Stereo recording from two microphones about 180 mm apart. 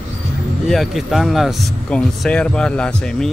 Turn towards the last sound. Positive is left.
turn(degrees=5)  # may be behind; listen again after turning